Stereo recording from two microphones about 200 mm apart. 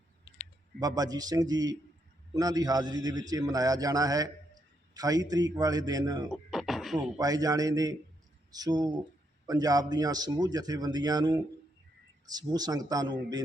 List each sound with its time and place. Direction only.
0.8 s a man's voice: 20° right (ahead or behind)
6.2 s a sound: centre (ahead or behind)
7.2 s a man's voice: 20° right (ahead or behind)